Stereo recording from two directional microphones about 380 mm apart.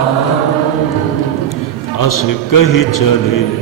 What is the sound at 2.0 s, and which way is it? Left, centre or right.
Mantra, left.